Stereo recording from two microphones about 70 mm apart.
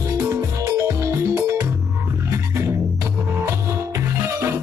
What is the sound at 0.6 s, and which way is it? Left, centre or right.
Music, right.